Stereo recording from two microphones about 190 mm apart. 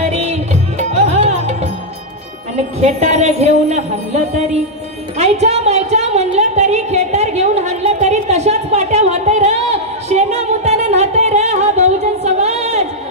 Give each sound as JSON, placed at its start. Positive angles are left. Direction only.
{"t": 0.0, "sound": "music", "side_deg": -35}
{"t": 2.5, "sound": "speech", "side_deg": -35}
{"t": 5.1, "sound": "music", "side_deg": -35}